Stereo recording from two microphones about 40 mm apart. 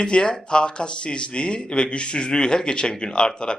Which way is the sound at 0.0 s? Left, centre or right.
Left.